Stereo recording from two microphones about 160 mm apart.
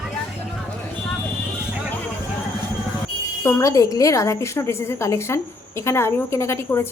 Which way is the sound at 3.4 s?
15° left (ahead or behind).